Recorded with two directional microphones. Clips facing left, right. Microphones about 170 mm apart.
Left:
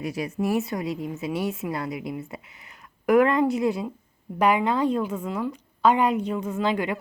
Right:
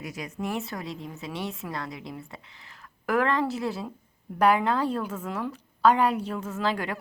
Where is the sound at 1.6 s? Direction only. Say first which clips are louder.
Left 6 dB; 15° left (ahead or behind).